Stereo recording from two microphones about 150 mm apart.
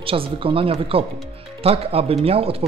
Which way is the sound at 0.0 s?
35° right (ahead or behind).